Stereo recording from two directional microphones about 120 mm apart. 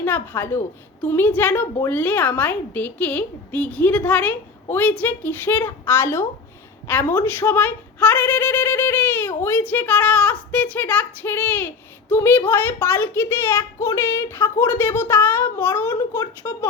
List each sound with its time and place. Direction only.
0.0 s a woman's voice: 15° left (ahead or behind)